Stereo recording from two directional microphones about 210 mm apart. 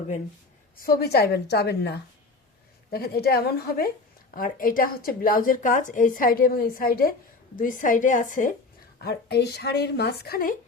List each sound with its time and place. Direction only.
0.8 s a woman's voice: 45° left (ahead or behind)
9.0 s speech: 50° left (ahead or behind)